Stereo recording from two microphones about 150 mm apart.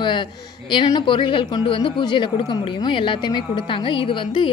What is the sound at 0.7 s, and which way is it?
Speech, 30° left (ahead or behind).